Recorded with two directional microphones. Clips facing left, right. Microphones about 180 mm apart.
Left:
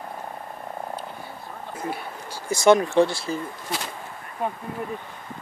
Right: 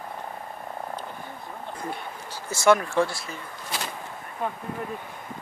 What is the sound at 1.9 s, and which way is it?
Speech, 10° left (ahead or behind).